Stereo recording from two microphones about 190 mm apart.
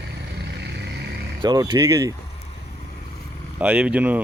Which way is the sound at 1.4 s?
25° right (ahead or behind).